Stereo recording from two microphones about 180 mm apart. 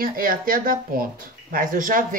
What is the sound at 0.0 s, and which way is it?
Speech, 50° right (ahead or behind).